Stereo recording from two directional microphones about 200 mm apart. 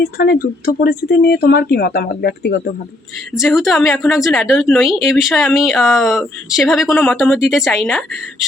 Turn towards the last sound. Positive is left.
turn(degrees=0)  # may be behind; listen again after turning